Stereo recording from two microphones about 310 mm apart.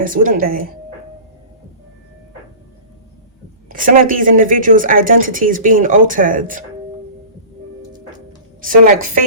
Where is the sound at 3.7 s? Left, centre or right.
Right.